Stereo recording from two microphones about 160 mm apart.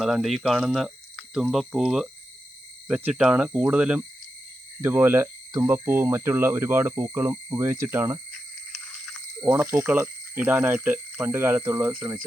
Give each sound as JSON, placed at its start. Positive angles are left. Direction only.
{"t": 0.0, "sound": "speech", "side_deg": 0}
{"t": 9.4, "sound": "speech", "side_deg": -15}
{"t": 11.9, "sound": "speech", "side_deg": -30}